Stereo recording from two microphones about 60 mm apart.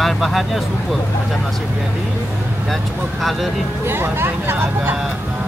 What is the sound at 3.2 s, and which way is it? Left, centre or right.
Speech, centre.